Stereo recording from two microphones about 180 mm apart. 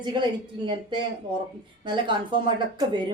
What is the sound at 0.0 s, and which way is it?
A woman's voice, 25° right (ahead or behind).